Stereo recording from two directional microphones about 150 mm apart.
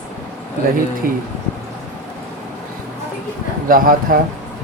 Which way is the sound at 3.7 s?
70° right (ahead or behind).